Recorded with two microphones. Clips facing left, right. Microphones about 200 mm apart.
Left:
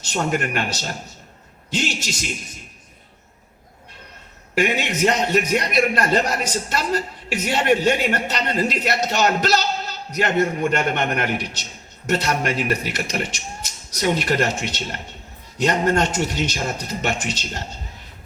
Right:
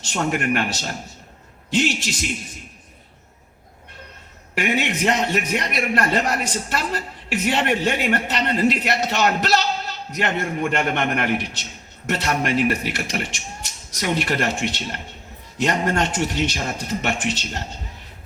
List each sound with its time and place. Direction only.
0.1 s a man's voice: 40° left (ahead or behind)
4.5 s a man's voice: 40° left (ahead or behind)